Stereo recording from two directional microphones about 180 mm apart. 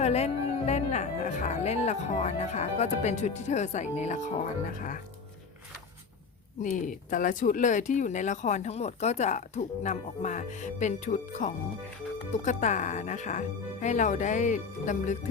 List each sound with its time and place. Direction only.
0.0 s speech: 35° left (ahead or behind)
6.6 s speech: 45° left (ahead or behind)